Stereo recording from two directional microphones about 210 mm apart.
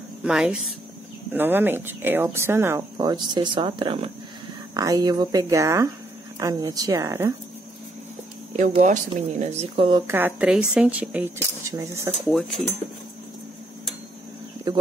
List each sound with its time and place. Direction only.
0.2 s speech: 5° right (ahead or behind)
8.5 s speech: 35° right (ahead or behind)
10.0 s speech: 10° right (ahead or behind)
12.4 s speech: centre (ahead or behind)
14.7 s speech: 20° right (ahead or behind)